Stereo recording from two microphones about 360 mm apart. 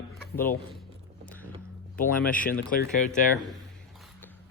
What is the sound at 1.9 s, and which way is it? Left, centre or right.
Speech, left.